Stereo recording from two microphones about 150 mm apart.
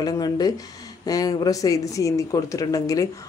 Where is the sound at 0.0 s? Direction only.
25° left (ahead or behind).